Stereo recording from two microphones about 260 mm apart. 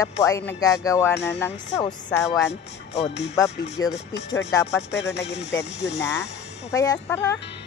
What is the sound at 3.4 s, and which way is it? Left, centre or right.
Speech, centre.